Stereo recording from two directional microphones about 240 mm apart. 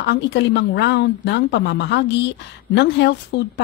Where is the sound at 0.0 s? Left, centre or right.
Left.